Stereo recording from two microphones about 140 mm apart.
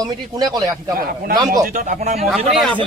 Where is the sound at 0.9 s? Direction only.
90° right.